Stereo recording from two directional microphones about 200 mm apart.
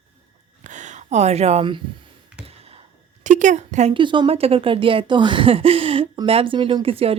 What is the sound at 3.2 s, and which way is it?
A woman's voice, 40° right (ahead or behind).